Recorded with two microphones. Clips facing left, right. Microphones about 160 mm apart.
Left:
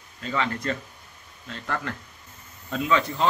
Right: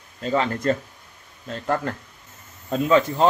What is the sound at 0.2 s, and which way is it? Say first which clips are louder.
Speech: right 5 dB; 40° right (ahead or behind).